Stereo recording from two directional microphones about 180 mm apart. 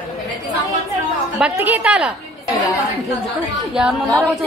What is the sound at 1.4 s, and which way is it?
Speech, 10° right (ahead or behind).